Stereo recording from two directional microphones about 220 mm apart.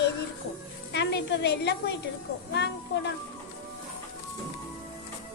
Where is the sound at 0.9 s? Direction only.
50° left (ahead or behind).